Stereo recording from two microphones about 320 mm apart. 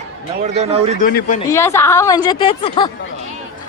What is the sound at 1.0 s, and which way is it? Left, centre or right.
Speech, left.